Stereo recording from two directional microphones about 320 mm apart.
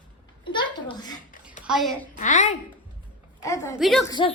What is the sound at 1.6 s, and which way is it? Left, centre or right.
Speech, centre.